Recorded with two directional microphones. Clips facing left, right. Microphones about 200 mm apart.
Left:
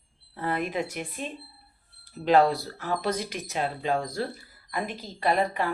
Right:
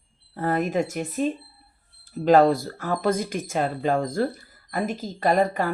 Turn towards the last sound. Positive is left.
turn(degrees=-45)  # may be behind; listen again after turning